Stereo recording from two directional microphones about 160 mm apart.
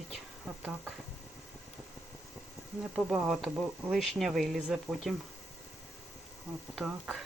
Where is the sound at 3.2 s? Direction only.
5° right (ahead or behind).